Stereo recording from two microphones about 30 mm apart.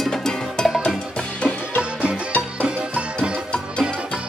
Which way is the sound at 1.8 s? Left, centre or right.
Right.